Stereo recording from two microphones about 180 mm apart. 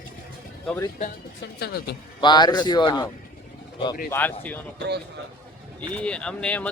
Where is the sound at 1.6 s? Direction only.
65° left (ahead or behind).